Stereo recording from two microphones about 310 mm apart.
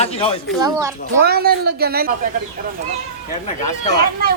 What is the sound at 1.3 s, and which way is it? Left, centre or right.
Speech, right.